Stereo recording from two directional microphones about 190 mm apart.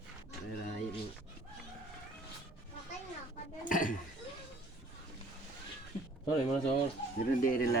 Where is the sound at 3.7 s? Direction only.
45° left (ahead or behind).